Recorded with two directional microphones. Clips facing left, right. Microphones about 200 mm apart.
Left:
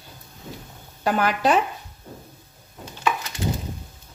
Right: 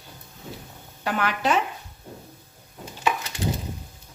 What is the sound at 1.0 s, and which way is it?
Speech, 40° left (ahead or behind).